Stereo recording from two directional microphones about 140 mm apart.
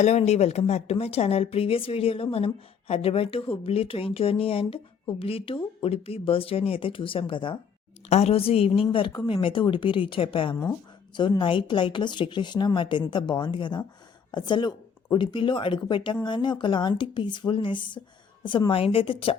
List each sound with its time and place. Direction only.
0.0 s a woman's voice: 55° left (ahead or behind); by 7.6 s 35° left (ahead or behind)
8.1 s a woman's voice: 45° left (ahead or behind)